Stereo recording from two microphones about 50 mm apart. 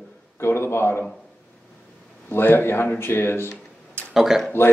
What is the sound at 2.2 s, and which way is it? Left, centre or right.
Speech, left.